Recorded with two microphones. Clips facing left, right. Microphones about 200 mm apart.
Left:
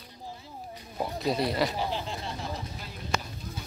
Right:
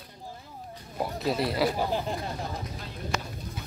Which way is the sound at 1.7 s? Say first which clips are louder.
Right 3 dB; 45° right (ahead or behind).